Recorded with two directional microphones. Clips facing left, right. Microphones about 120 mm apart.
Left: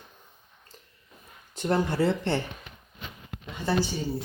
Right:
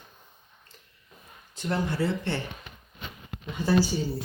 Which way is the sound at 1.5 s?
45° left (ahead or behind).